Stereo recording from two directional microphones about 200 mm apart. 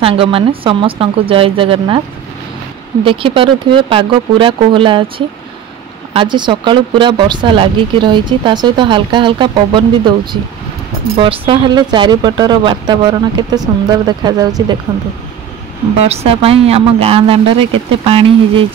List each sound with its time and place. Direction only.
0.0 s speech: 25° right (ahead or behind)
3.1 s speech: 25° right (ahead or behind)
6.1 s speech: 25° right (ahead or behind)
16.0 s speech: 30° right (ahead or behind)